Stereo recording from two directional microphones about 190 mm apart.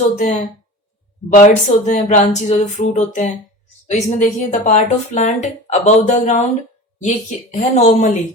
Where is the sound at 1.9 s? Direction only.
40° left (ahead or behind).